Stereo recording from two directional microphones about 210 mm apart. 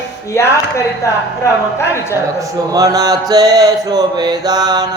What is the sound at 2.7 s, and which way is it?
Mantra, 15° right (ahead or behind).